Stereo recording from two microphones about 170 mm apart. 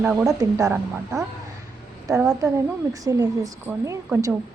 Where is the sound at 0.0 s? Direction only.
15° right (ahead or behind).